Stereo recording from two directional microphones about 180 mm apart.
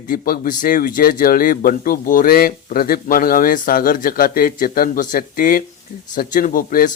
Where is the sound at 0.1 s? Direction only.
50° left (ahead or behind).